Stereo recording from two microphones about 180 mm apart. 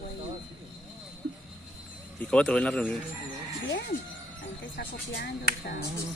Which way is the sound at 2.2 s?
5° left (ahead or behind).